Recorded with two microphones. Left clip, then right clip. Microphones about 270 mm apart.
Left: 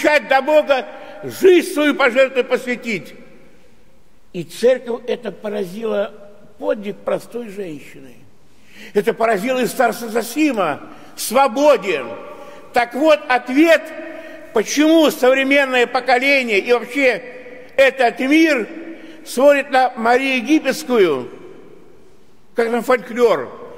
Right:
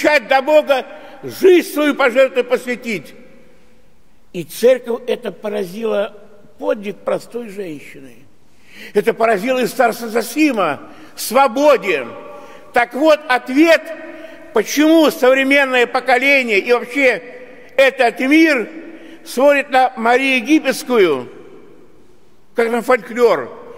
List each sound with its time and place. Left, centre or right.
0.0 s a man's voice: centre
4.3 s a man's voice: centre
22.6 s a man's voice: centre